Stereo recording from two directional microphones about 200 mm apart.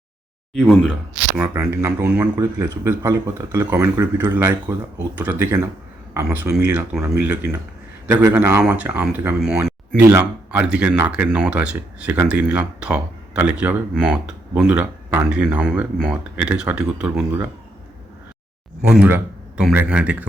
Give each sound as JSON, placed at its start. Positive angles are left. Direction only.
{"t": 0.5, "sound": "speech", "side_deg": 5}
{"t": 1.4, "sound": "speech", "side_deg": -15}
{"t": 18.8, "sound": "speech", "side_deg": -5}